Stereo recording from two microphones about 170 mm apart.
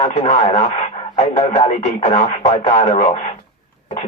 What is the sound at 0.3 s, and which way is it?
Speech, 40° left (ahead or behind).